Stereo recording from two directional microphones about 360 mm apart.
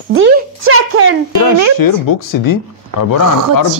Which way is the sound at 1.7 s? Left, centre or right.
Left.